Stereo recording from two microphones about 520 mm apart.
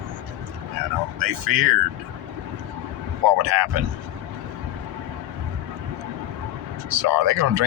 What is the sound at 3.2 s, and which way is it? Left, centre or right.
Speech, right.